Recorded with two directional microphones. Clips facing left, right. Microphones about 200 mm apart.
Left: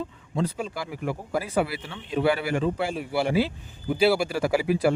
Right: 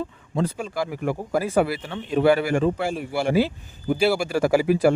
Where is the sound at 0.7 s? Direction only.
45° right (ahead or behind).